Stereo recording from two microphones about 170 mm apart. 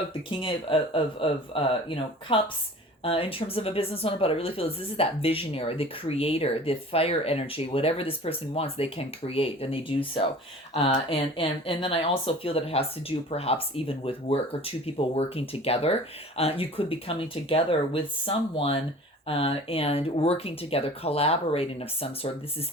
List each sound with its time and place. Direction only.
0.1 s speech: 30° left (ahead or behind)